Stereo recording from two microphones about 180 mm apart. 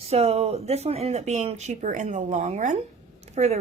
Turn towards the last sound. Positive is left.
turn(degrees=-45)  # may be behind; listen again after turning